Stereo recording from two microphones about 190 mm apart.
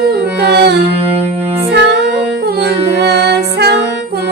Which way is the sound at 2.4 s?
60° right (ahead or behind).